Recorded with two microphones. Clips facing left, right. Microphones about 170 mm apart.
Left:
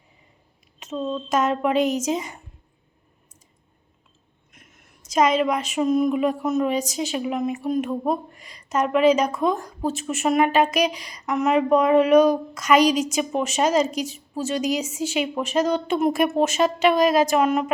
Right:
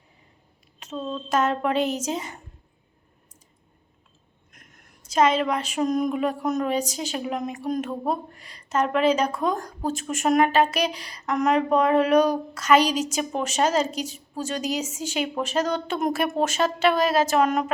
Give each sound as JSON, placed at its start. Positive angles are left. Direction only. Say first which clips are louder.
{"t": 0.9, "sound": "a woman's voice", "louder": "left 3 dB", "side_deg": 5}
{"t": 1.7, "sound": "a woman's voice", "louder": "left 3 dB", "side_deg": -30}
{"t": 2.1, "sound": "a woman's voice", "louder": "left 3 dB", "side_deg": 10}
{"t": 5.7, "sound": "a sound", "louder": "left 4 dB", "side_deg": 5}
{"t": 6.7, "sound": "a woman's voice", "louder": "left 2 dB", "side_deg": 10}